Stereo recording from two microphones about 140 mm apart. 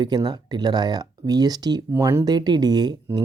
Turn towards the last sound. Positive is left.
turn(degrees=-30)  # may be behind; listen again after turning